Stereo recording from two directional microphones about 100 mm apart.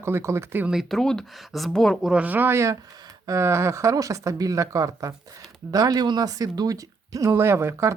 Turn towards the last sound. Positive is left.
turn(degrees=-30)  # may be behind; listen again after turning